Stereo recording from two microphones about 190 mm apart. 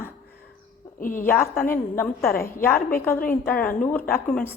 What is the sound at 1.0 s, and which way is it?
Speech, 45° left (ahead or behind).